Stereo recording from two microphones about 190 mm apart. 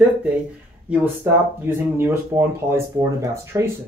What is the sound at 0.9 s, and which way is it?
Speech, 10° right (ahead or behind).